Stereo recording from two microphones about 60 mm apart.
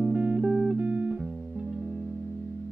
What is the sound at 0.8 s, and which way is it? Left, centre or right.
Music, right.